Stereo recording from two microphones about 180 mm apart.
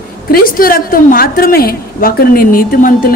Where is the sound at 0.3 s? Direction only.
55° left (ahead or behind).